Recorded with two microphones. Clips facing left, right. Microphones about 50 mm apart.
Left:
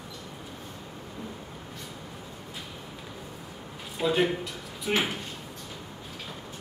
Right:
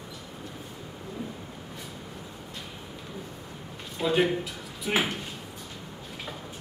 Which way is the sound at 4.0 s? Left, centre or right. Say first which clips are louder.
Right 1 dB; centre.